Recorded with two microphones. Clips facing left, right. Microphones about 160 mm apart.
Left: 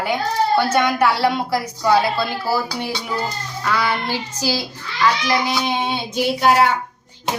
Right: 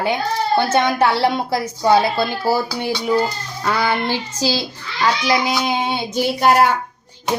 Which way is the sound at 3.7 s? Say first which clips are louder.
Right 2 dB; 30° right (ahead or behind).